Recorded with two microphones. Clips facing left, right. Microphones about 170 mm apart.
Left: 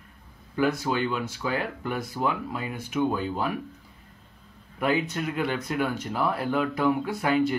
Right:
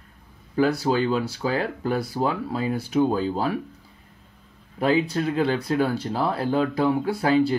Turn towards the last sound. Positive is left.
turn(degrees=-30)  # may be behind; listen again after turning